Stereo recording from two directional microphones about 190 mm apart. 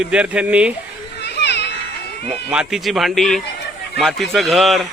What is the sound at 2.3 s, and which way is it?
A man's voice, 5° right (ahead or behind).